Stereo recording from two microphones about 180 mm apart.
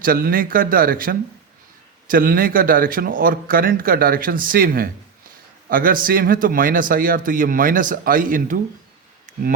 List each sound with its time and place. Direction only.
0.0 s speech: 50° right (ahead or behind)